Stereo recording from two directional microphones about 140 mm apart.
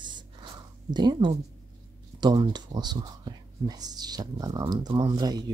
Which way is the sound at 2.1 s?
30° right (ahead or behind).